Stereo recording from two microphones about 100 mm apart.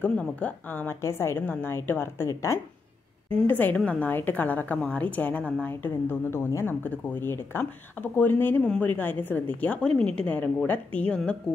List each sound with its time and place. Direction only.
0.0 s speech: 15° left (ahead or behind); by 2.6 s 30° left (ahead or behind)
3.4 s a woman's voice: 20° left (ahead or behind)